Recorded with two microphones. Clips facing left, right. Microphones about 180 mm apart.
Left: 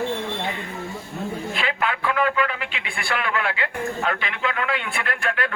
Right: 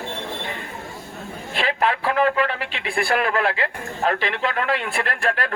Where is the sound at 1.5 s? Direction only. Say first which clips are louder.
Right 7 dB; 40° right (ahead or behind).